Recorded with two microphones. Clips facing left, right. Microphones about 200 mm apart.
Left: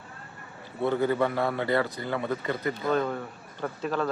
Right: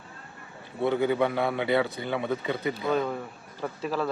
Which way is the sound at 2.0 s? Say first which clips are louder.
Right 1 dB; 20° right (ahead or behind).